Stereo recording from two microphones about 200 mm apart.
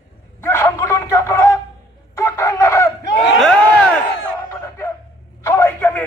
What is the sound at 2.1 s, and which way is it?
Chicken, 15° left (ahead or behind).